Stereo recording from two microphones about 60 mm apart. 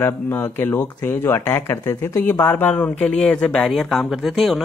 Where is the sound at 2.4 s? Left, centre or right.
Left.